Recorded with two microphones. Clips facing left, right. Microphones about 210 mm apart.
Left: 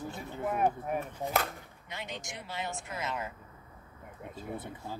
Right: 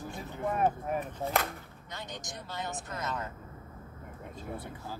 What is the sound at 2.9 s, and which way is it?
Speech, 15° left (ahead or behind).